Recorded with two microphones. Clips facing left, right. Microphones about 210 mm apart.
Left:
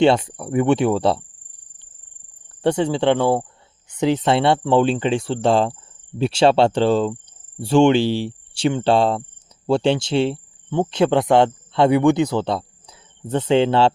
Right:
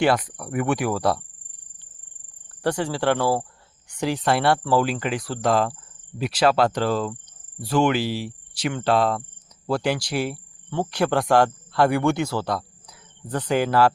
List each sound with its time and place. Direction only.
0.0 s speech: 25° left (ahead or behind)
2.6 s speech: 25° left (ahead or behind)